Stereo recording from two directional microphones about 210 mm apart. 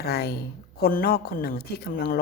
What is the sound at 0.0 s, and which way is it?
Speech, 50° left (ahead or behind).